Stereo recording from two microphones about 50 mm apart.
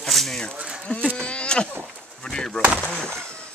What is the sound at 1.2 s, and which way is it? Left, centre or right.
Speech, left.